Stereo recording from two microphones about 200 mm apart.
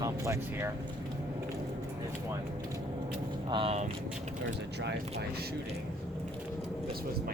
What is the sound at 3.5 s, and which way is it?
Speech, 30° right (ahead or behind).